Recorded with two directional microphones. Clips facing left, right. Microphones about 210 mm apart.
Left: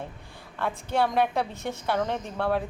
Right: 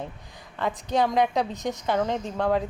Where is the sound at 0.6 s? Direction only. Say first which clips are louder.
Right 2 dB; 15° right (ahead or behind).